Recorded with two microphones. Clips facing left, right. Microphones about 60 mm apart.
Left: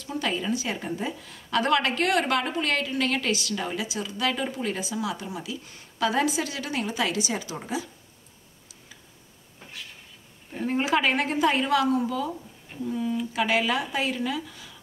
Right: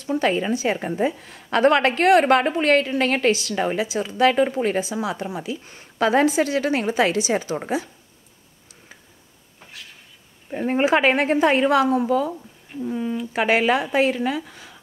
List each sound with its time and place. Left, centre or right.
0.0 s a woman's voice: right
10.5 s a woman's voice: right